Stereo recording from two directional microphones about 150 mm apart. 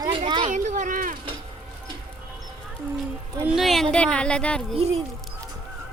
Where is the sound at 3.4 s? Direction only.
5° right (ahead or behind).